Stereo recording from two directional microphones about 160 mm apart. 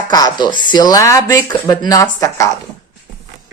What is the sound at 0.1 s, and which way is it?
Speech, 25° left (ahead or behind).